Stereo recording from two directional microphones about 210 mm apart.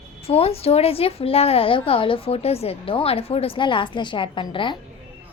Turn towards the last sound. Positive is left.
turn(degrees=20)  # may be behind; listen again after turning